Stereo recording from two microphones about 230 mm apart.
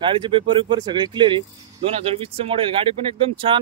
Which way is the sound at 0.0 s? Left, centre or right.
Right.